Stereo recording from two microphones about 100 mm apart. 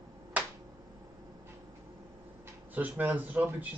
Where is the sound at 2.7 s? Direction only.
15° right (ahead or behind).